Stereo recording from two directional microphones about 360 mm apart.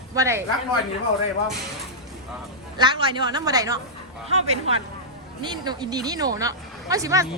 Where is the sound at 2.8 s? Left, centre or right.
Centre.